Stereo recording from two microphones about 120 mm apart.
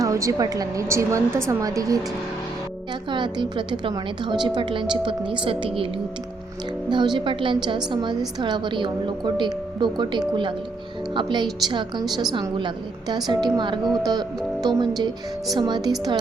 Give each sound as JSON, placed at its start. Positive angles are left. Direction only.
{"t": 0.0, "sound": "a woman's voice", "side_deg": -25}
{"t": 3.1, "sound": "a woman's voice", "side_deg": -40}
{"t": 6.9, "sound": "a woman's voice", "side_deg": -40}